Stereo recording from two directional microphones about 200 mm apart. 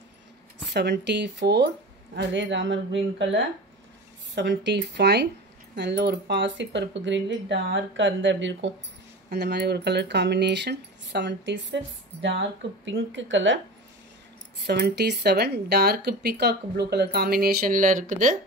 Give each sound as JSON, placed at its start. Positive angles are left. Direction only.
{"t": 0.7, "sound": "speech", "side_deg": -60}
{"t": 14.6, "sound": "speech", "side_deg": -55}